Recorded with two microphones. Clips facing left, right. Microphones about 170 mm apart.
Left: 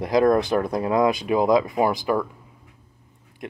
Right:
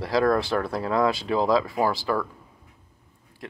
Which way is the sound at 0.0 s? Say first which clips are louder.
Left 4 dB; 20° left (ahead or behind).